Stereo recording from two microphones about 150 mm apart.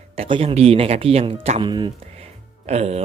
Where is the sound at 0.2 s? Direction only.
40° right (ahead or behind).